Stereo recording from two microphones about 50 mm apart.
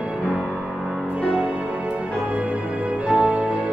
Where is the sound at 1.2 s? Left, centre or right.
Right.